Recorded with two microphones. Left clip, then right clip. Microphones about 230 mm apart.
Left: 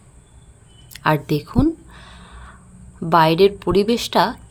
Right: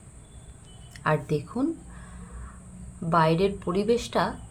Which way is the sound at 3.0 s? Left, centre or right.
Left.